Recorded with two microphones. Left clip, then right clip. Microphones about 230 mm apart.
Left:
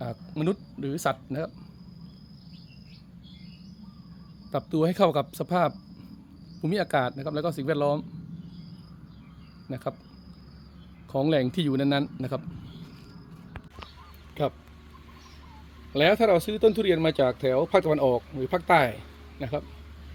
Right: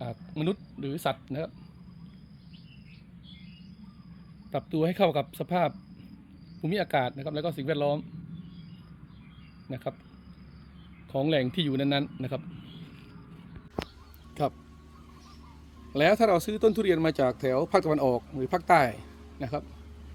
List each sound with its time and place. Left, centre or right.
0.0 s a sound: centre
1.0 s speech: centre
4.5 s speech: centre
9.6 s speech: centre
11.1 s speech: centre
14.4 s speech: centre
15.9 s speech: centre